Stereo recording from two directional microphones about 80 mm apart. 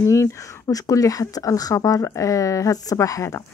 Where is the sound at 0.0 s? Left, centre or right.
Left.